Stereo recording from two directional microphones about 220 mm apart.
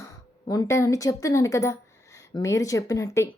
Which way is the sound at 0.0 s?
15° left (ahead or behind).